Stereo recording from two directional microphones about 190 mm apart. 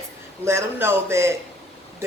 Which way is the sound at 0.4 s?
15° right (ahead or behind).